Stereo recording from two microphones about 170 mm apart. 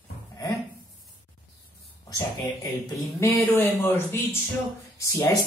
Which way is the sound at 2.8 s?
15° left (ahead or behind).